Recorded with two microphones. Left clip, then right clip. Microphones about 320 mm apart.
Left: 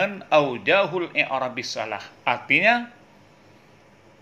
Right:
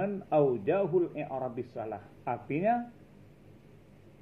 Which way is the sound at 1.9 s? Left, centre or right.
Left.